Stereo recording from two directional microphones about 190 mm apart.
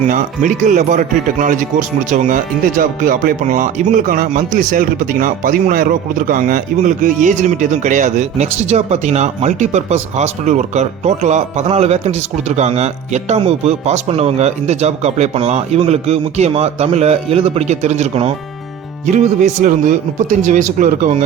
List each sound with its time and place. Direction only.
0.1 s speech: 40° right (ahead or behind)